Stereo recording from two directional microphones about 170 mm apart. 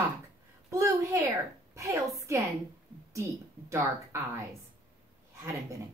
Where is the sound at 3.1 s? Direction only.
15° right (ahead or behind).